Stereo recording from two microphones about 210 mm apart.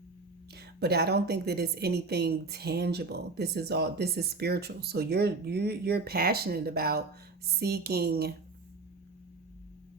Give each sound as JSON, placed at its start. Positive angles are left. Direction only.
{"t": 0.5, "sound": "a woman's voice", "side_deg": -50}